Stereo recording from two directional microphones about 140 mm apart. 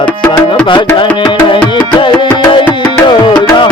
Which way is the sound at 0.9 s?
35° left (ahead or behind).